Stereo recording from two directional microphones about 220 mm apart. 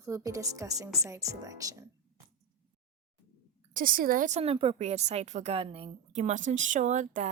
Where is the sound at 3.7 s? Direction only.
40° right (ahead or behind).